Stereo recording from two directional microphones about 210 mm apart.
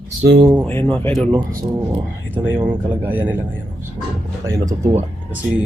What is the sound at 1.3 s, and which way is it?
A man's voice, 15° right (ahead or behind).